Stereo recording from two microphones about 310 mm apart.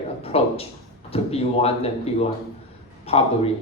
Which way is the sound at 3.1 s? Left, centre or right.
Centre.